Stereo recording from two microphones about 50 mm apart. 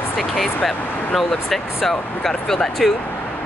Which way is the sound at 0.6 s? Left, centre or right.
Centre.